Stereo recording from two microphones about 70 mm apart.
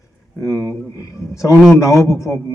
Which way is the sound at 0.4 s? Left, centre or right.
Left.